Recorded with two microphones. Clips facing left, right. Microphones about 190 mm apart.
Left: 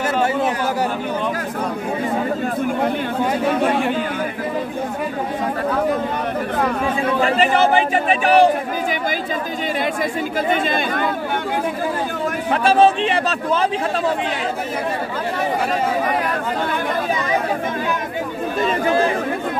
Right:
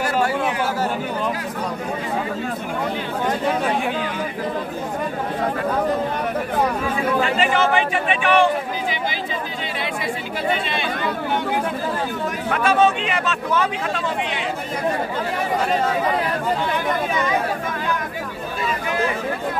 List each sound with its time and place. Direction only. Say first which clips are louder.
7.2 s speech: left 3 dB; 35° left (ahead or behind)
10.5 s speech: left 3 dB; 50° left (ahead or behind)
12.4 s speech: left 3 dB; 30° left (ahead or behind)
18.6 s speech: left 7 dB; 35° left (ahead or behind)